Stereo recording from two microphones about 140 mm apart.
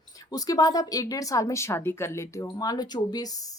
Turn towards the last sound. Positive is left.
turn(degrees=30)  # may be behind; listen again after turning